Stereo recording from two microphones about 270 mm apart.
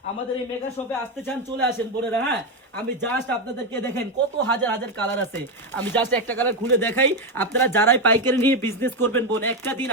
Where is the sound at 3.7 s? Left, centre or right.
Centre.